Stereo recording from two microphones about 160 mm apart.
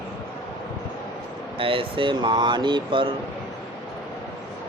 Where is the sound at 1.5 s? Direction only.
35° right (ahead or behind).